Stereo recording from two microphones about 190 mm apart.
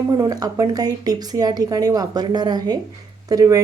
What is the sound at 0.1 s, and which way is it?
A woman's voice, 20° right (ahead or behind).